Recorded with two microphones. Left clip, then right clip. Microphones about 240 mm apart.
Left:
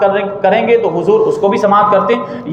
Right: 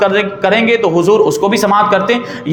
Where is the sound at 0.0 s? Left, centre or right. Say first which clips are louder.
Even; right.